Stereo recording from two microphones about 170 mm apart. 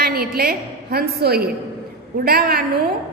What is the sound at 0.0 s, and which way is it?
A woman's voice, 65° right (ahead or behind).